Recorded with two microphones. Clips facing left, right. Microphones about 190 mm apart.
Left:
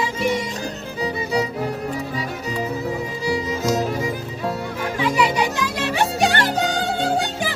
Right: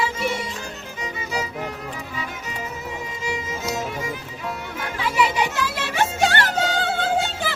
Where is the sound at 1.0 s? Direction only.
35° left (ahead or behind).